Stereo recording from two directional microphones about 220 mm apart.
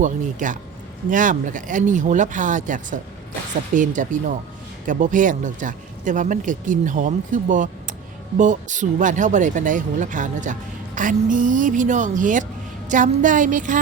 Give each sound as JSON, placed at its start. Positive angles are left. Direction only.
{"t": 0.0, "sound": "speech", "side_deg": -35}
{"t": 7.5, "sound": "a sound", "side_deg": -35}
{"t": 8.4, "sound": "speech", "side_deg": -35}